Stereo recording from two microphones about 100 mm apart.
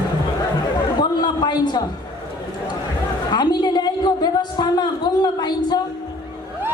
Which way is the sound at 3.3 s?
45° left (ahead or behind).